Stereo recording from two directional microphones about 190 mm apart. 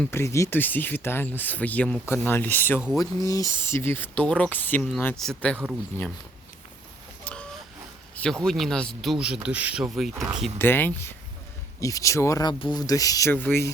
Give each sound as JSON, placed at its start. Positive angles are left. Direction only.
{"t": 0.0, "sound": "speech", "side_deg": 15}
{"t": 7.3, "sound": "chicken", "side_deg": 5}
{"t": 8.1, "sound": "speech", "side_deg": 5}
{"t": 10.6, "sound": "speech", "side_deg": 10}